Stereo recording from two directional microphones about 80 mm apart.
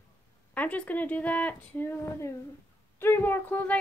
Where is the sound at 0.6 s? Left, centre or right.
Centre.